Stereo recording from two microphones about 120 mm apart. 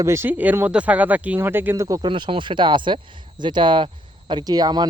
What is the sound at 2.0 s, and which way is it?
Speech, 40° right (ahead or behind).